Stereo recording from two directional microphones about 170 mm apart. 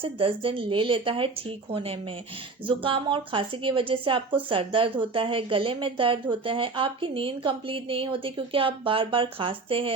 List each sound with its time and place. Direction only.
0.0 s a woman's voice: 30° right (ahead or behind)